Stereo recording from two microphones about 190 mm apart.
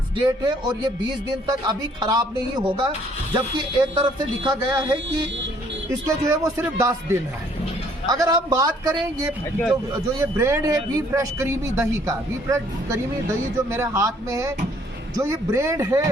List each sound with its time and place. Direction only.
0.2 s speech: 25° right (ahead or behind)